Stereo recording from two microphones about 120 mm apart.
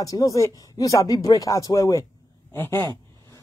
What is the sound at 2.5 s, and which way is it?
Speech, 20° left (ahead or behind).